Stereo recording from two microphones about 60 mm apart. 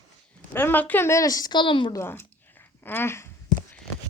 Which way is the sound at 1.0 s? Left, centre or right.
Left.